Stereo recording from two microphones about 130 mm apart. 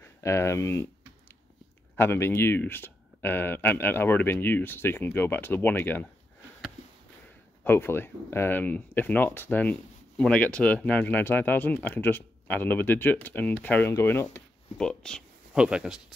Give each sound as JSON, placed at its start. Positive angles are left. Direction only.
{"t": 0.0, "sound": "speech", "side_deg": 20}
{"t": 2.0, "sound": "speech", "side_deg": 20}
{"t": 7.6, "sound": "speech", "side_deg": 15}
{"t": 14.8, "sound": "speech", "side_deg": 5}
{"t": 15.5, "sound": "speech", "side_deg": -5}